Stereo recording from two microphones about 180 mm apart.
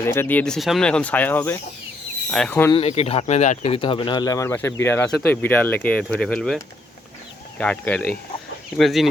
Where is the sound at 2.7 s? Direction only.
35° left (ahead or behind).